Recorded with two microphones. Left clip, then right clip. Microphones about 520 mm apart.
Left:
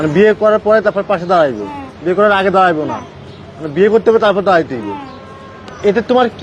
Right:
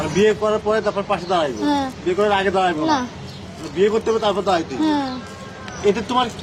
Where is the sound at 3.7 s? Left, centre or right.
Left.